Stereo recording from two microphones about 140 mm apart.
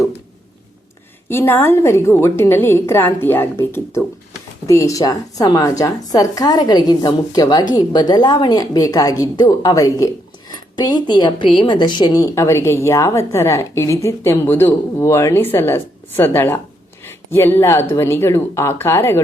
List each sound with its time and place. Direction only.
1.3 s a woman's voice: 15° left (ahead or behind)